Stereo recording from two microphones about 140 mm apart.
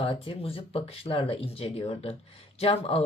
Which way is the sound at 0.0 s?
40° left (ahead or behind).